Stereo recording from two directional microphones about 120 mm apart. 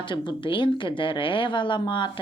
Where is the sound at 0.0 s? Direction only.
40° left (ahead or behind).